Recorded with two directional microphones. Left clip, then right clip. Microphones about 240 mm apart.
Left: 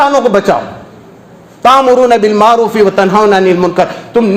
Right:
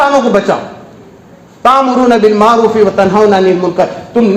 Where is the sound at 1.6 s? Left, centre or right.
Left.